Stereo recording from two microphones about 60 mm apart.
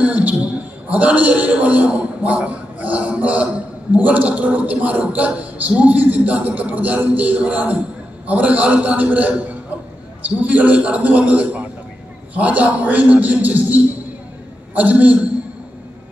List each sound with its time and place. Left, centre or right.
0.0 s a man's voice: right